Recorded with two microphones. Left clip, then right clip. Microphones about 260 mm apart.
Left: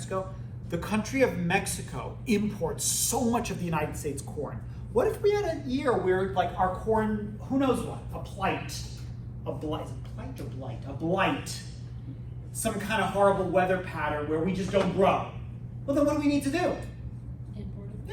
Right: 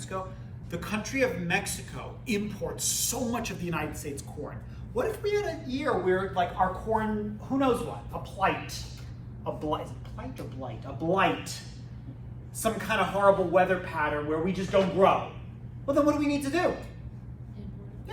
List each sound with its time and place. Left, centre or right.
0.1 s a woman's voice: centre; by 16.6 s right